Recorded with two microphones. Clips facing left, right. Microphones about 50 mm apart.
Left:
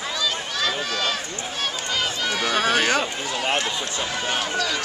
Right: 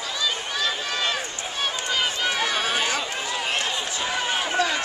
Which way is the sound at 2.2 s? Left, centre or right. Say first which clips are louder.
Left 2 dB; centre.